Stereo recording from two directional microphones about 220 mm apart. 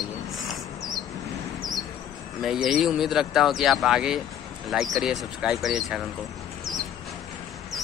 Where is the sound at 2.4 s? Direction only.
Centre (ahead or behind).